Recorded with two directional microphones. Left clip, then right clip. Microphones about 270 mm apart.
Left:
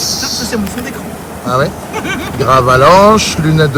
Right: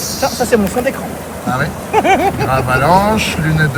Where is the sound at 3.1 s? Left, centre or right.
Centre.